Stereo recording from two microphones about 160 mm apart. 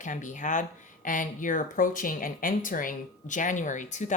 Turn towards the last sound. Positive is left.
turn(degrees=50)  # may be behind; listen again after turning